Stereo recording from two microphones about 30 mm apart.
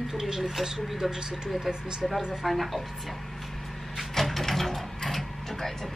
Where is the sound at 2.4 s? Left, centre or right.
Centre.